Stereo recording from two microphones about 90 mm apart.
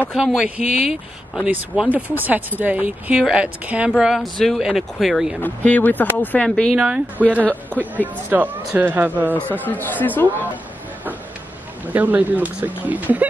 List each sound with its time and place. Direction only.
0.1 s speech: 5° right (ahead or behind)
4.0 s speech: centre (ahead or behind)
5.4 s speech: 20° left (ahead or behind)
6.7 s speech: 10° right (ahead or behind)
9.3 s speech: 20° left (ahead or behind)
11.9 s speech: 20° right (ahead or behind)